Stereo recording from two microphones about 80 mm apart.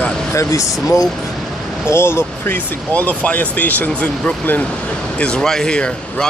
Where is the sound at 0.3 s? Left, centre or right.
Left.